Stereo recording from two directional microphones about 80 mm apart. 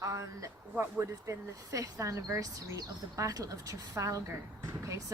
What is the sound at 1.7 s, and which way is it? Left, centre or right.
A woman's voice, right.